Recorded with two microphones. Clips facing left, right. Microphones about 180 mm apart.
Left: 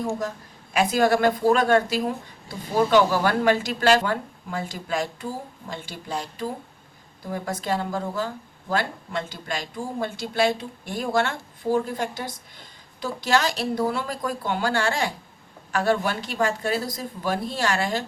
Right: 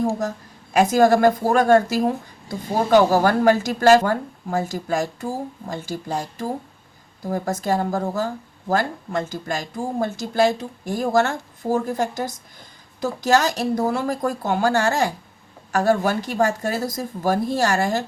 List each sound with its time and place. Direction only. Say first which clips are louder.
0.1 s speech: right 3 dB; 45° right (ahead or behind)
2.9 s speech: right 6 dB; 45° right (ahead or behind)